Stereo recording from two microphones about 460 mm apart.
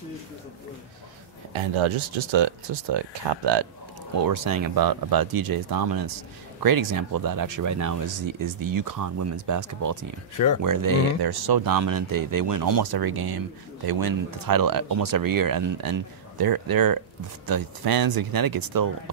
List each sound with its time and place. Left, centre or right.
1.5 s speech: right
4.2 s speech: right